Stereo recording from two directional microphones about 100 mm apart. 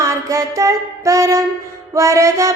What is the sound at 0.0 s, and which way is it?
Music, 35° right (ahead or behind).